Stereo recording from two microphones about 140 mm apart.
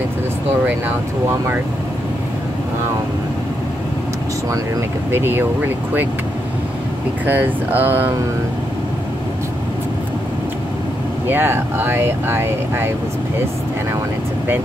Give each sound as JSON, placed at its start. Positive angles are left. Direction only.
{"t": 5.1, "sound": "speech", "side_deg": -15}
{"t": 7.2, "sound": "speech", "side_deg": -15}
{"t": 11.2, "sound": "speech", "side_deg": -15}